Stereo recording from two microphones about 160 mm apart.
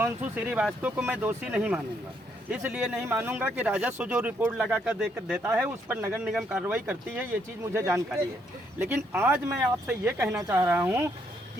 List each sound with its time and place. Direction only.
0.0 s speech: 10° right (ahead or behind)